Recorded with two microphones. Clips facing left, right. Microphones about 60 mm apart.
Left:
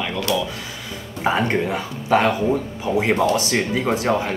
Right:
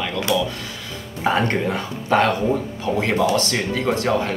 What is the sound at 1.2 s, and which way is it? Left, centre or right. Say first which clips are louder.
Speech: even; centre.